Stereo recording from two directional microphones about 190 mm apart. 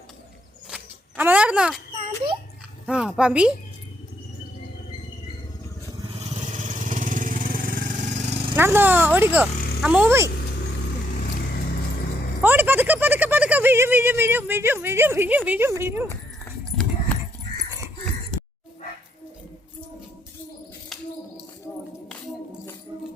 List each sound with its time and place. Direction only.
0.7 s a sound: 10° right (ahead or behind)
2.8 s speech: 5° right (ahead or behind)
6.1 s vehicle: 40° right (ahead or behind)
8.5 s speech: 10° right (ahead or behind)
12.4 s speech: 10° right (ahead or behind)
16.7 s clip-clop: 5° left (ahead or behind)